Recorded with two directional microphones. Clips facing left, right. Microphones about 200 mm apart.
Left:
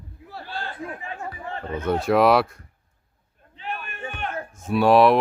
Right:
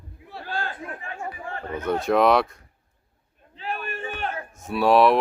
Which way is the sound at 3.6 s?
35° right (ahead or behind).